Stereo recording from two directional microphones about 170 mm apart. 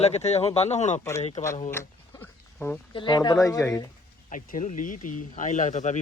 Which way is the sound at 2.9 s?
25° left (ahead or behind).